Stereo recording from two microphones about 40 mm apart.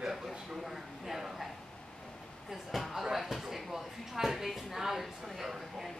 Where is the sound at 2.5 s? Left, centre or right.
Centre.